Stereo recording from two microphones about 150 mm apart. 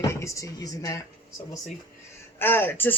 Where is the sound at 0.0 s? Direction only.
20° left (ahead or behind).